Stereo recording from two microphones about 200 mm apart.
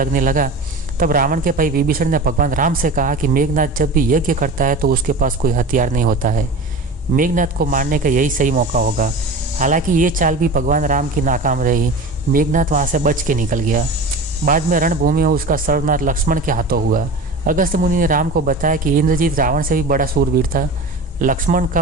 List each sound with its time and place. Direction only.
0.0 s speech: 45° right (ahead or behind)